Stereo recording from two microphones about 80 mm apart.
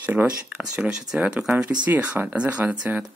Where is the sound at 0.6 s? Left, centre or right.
Centre.